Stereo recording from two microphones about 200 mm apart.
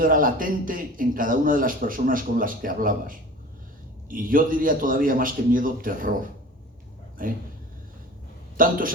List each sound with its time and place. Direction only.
0.0 s a man's voice: 45° right (ahead or behind)
7.2 s a man's voice: 45° right (ahead or behind)
8.5 s a man's voice: 45° right (ahead or behind)